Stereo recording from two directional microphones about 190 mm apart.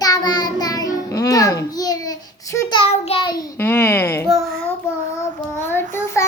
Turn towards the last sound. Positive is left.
turn(degrees=10)  # may be behind; listen again after turning